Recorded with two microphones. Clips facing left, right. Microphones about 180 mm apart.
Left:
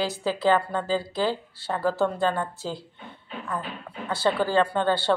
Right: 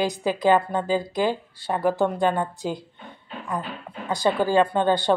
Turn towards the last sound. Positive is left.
turn(degrees=-15)  # may be behind; listen again after turning